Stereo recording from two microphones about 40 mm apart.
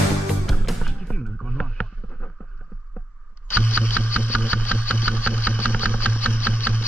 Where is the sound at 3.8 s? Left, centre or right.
Left.